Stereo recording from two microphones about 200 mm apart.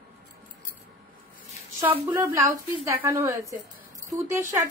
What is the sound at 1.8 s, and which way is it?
A woman's voice, 10° right (ahead or behind).